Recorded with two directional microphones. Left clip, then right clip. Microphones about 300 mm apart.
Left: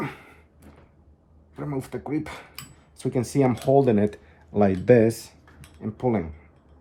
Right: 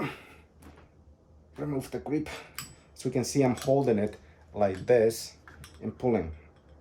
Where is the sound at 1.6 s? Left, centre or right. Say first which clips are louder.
Left 2 dB; centre.